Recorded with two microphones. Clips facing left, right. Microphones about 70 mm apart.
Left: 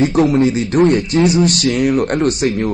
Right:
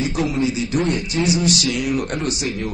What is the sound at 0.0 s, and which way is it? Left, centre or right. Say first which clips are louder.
Speech: left 8 dB; left.